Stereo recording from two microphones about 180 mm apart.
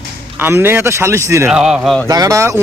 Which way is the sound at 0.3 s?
10° right (ahead or behind).